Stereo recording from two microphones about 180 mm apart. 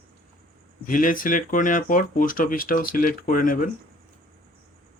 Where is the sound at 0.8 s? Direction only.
50° left (ahead or behind).